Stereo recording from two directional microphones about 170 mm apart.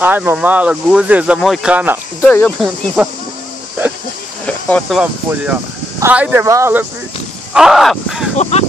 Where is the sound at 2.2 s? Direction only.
10° left (ahead or behind).